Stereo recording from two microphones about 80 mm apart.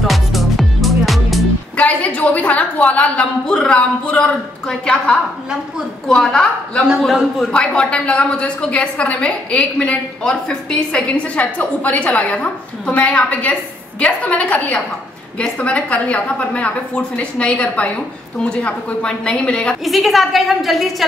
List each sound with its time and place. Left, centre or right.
0.0 s music: centre
1.8 s a woman's voice: centre
7.5 s a woman's voice: centre
19.8 s a woman's voice: centre